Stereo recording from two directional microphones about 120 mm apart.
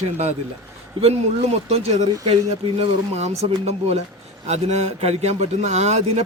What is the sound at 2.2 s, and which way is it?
A man's voice, 60° right (ahead or behind).